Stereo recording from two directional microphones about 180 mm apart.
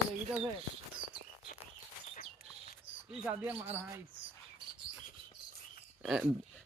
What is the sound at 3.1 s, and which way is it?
Speech, 5° right (ahead or behind).